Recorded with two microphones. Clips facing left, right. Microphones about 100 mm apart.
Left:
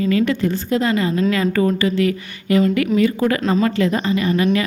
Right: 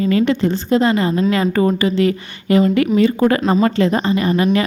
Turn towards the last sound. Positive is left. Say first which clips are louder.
# right 2 dB
turn(degrees=-35)  # may be behind; listen again after turning